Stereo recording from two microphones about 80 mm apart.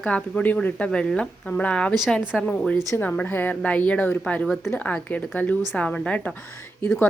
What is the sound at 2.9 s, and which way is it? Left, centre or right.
Speech, left.